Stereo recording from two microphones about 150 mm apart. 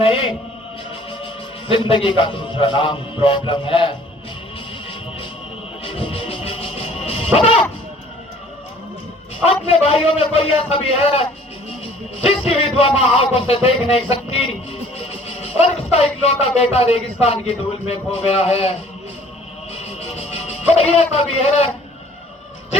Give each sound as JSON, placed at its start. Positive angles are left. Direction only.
{"t": 0.0, "sound": "a man's voice", "side_deg": 35}
{"t": 5.8, "sound": "music", "side_deg": 40}
{"t": 9.6, "sound": "a man's voice", "side_deg": 40}
{"t": 19.7, "sound": "music", "side_deg": 45}